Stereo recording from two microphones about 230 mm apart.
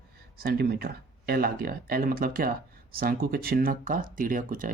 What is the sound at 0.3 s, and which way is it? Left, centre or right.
Speech, right.